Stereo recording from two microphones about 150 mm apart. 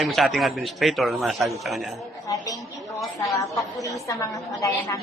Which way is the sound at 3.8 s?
20° left (ahead or behind).